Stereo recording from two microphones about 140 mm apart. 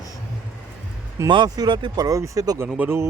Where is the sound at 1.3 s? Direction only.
35° right (ahead or behind).